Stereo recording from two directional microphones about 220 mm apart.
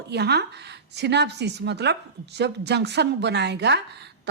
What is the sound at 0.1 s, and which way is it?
A woman's voice, 50° right (ahead or behind).